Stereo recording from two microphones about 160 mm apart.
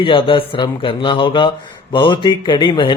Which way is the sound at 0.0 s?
35° left (ahead or behind).